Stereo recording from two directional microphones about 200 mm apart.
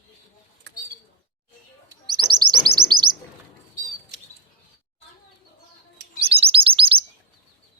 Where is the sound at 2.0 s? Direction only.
20° right (ahead or behind).